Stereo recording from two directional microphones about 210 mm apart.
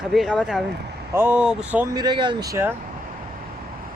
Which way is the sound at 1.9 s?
20° right (ahead or behind).